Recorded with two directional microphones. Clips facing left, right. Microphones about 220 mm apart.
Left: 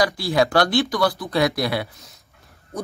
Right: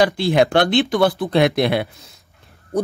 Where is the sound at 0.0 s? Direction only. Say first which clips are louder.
Right 4 dB; 25° right (ahead or behind).